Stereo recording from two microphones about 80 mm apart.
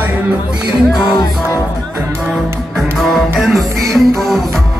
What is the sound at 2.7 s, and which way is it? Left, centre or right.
Music, centre.